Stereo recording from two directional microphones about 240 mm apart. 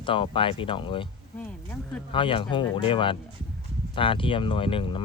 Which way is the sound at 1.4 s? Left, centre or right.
Centre.